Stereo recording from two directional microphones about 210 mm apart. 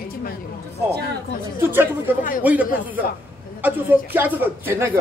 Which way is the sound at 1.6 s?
10° right (ahead or behind).